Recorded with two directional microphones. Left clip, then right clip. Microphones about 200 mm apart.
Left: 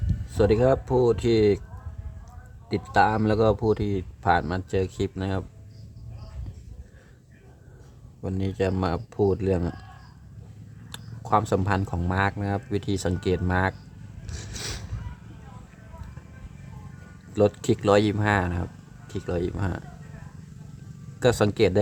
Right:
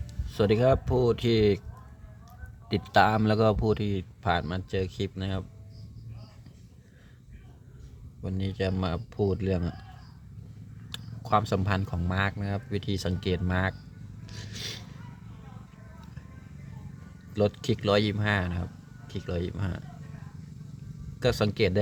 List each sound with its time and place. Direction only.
0.3 s speech: 5° left (ahead or behind)
2.6 s speech: centre (ahead or behind)
8.2 s speech: 15° left (ahead or behind)
10.8 s speech: 10° left (ahead or behind)
14.5 s a sound: 25° left (ahead or behind)
17.3 s speech: 15° left (ahead or behind)
21.2 s speech: 20° left (ahead or behind)